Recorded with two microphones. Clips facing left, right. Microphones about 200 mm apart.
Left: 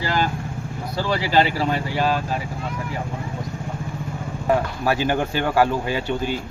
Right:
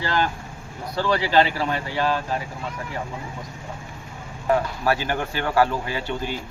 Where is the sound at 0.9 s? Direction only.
5° left (ahead or behind).